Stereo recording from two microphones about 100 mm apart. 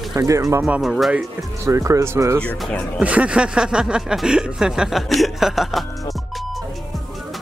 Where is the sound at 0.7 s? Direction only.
5° right (ahead or behind).